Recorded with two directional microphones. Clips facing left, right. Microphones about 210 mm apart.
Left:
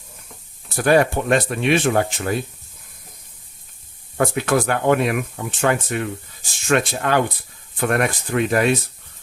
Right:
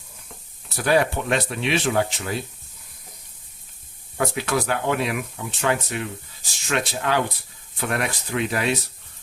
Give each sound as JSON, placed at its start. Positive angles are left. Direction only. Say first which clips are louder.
{"t": 0.8, "sound": "speech", "louder": "left 4 dB", "side_deg": 50}
{"t": 4.2, "sound": "speech", "louder": "left 5 dB", "side_deg": 50}